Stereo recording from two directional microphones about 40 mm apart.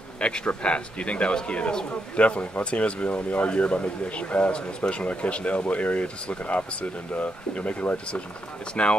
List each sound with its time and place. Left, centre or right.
0.5 s a man's voice: left
8.8 s a man's voice: left